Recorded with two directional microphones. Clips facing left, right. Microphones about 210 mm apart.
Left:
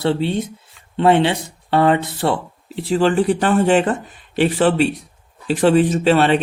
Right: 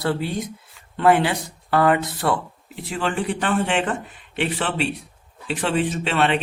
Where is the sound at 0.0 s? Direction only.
25° left (ahead or behind).